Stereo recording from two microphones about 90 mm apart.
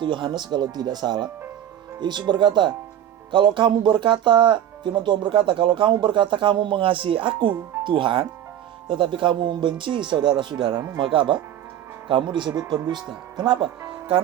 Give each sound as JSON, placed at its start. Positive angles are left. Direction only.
{"t": 0.0, "sound": "speech", "side_deg": -60}